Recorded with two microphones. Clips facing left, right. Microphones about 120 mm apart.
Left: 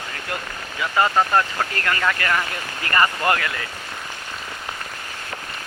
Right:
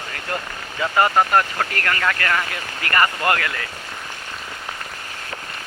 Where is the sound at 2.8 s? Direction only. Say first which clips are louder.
Even; 20° left (ahead or behind).